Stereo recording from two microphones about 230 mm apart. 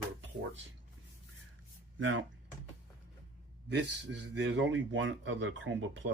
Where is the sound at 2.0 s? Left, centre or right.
Right.